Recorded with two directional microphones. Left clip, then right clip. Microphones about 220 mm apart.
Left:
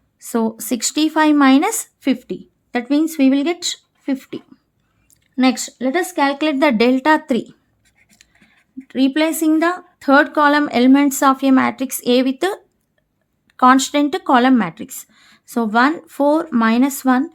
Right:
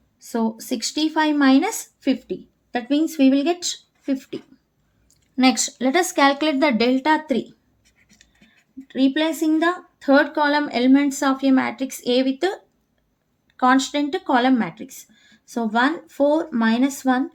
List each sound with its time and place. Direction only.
0.2 s speech: 40° left (ahead or behind)
8.9 s speech: 40° left (ahead or behind)
13.6 s speech: 45° left (ahead or behind)